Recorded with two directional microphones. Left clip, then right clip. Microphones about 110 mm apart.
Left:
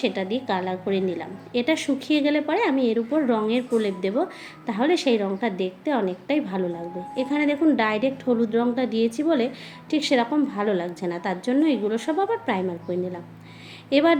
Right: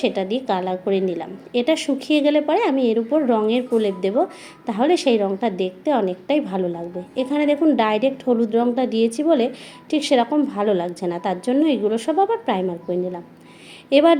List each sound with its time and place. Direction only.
0.0 s a woman's voice: 25° right (ahead or behind)